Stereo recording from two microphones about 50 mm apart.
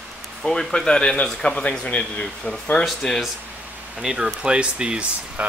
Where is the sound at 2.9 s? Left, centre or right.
Centre.